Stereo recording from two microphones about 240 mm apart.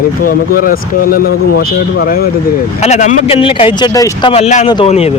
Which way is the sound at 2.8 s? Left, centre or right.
Left.